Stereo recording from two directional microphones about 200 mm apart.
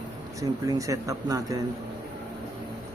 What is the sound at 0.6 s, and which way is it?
Speech, 15° right (ahead or behind).